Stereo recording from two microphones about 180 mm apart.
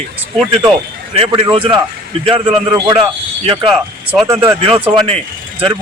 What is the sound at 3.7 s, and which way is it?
Speech, 5° right (ahead or behind).